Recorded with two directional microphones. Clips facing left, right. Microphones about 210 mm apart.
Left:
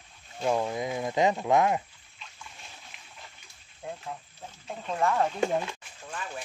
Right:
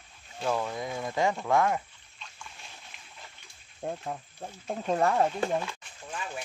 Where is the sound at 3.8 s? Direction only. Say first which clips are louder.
Right 4 dB; 45° right (ahead or behind).